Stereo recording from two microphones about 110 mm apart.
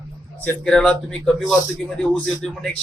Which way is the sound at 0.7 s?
5° left (ahead or behind).